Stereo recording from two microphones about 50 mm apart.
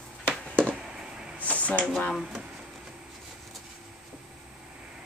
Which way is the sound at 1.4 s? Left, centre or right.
Left.